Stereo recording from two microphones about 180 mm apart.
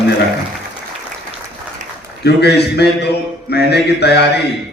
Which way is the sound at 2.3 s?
65° left (ahead or behind).